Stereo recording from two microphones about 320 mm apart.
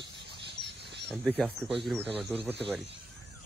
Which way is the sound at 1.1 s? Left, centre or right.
Centre.